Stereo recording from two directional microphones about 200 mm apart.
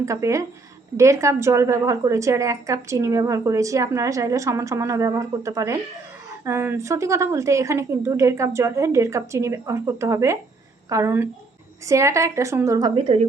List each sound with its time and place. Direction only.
0.0 s a woman's voice: 15° right (ahead or behind)